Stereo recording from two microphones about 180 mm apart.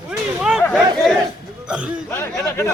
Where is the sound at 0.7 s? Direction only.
Centre (ahead or behind).